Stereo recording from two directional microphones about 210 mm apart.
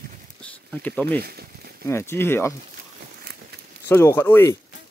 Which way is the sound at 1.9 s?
10° left (ahead or behind).